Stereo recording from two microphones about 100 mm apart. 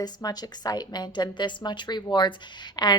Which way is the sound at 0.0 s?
40° left (ahead or behind).